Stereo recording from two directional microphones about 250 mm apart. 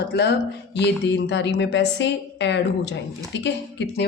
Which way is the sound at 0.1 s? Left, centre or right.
Left.